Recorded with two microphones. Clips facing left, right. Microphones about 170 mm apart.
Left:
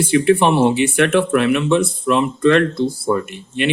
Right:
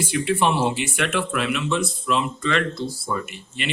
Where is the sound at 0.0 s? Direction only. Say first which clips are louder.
Left 8 dB; 60° left (ahead or behind).